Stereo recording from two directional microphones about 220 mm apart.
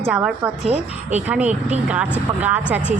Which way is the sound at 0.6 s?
25° right (ahead or behind).